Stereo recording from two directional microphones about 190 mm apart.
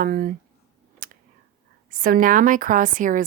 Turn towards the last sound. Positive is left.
turn(degrees=-45)  # may be behind; listen again after turning